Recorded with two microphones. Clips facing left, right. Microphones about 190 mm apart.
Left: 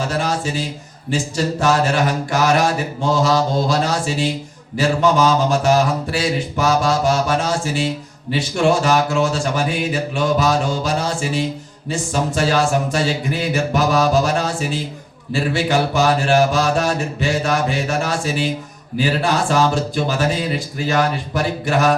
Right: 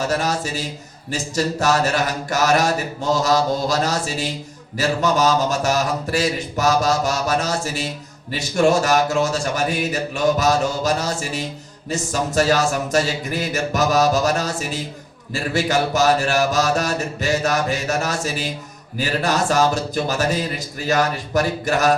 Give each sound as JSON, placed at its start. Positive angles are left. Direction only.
{"t": 0.2, "sound": "speech", "side_deg": -40}